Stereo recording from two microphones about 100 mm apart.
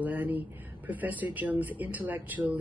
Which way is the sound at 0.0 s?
15° right (ahead or behind).